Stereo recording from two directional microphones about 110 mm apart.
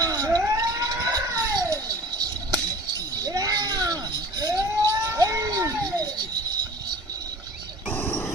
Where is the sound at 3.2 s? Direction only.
35° right (ahead or behind).